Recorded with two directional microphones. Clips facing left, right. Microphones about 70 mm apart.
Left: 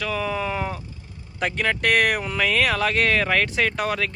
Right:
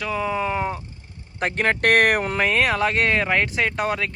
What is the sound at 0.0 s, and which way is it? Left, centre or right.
Speech, centre.